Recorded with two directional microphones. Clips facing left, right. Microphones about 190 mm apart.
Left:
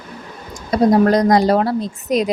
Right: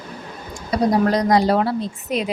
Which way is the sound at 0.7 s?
45° left (ahead or behind).